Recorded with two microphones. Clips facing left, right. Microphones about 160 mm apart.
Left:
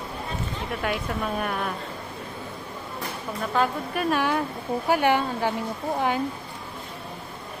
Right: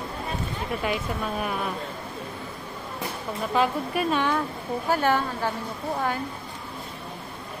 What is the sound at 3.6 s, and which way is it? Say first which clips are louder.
Speech: right 1 dB; 5° right (ahead or behind).